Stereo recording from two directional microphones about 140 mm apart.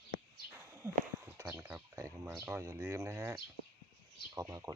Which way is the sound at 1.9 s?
20° right (ahead or behind).